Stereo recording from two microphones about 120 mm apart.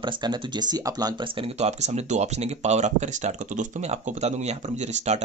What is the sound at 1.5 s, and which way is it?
Speech, 65° right (ahead or behind).